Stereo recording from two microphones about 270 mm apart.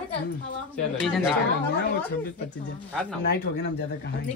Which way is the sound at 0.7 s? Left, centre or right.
Centre.